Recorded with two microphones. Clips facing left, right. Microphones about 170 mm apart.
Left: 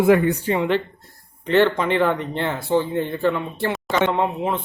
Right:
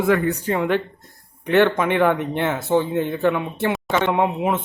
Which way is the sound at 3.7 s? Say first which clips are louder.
Left 1 dB; 5° right (ahead or behind).